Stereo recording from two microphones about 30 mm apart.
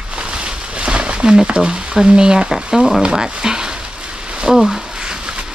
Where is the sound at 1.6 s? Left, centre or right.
Right.